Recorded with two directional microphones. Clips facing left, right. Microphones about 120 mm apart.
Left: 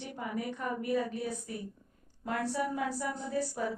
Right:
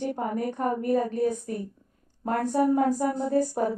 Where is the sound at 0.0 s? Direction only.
45° right (ahead or behind).